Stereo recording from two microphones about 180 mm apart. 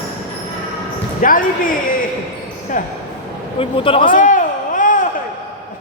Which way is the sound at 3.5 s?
30° left (ahead or behind).